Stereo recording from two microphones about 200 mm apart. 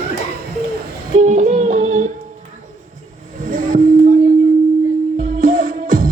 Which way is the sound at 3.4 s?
40° right (ahead or behind).